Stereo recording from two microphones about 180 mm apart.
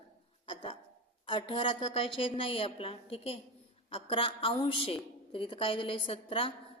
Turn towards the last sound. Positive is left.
turn(degrees=30)  # may be behind; listen again after turning